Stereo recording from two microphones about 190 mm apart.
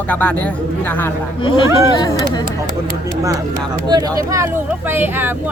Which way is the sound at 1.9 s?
20° left (ahead or behind).